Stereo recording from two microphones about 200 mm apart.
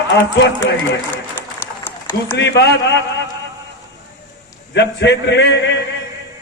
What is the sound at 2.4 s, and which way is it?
Speech, 60° left (ahead or behind).